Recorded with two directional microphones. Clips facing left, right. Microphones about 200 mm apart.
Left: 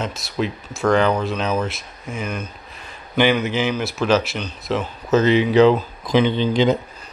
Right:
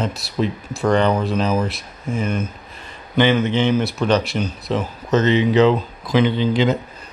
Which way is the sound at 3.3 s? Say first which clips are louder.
Right 3 dB; 25° right (ahead or behind).